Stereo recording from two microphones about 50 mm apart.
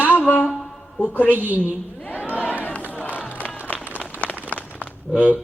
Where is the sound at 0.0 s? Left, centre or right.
Left.